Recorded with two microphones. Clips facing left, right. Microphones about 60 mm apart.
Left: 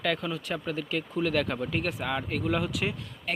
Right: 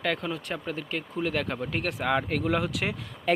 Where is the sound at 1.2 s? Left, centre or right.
Right.